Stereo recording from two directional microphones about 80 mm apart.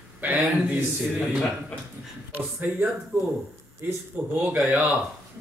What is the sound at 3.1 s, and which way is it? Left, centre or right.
Speech, right.